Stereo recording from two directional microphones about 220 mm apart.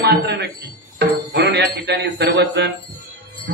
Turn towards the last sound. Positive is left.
turn(degrees=-50)  # may be behind; listen again after turning